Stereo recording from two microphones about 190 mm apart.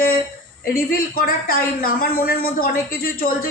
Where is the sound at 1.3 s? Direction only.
50° left (ahead or behind).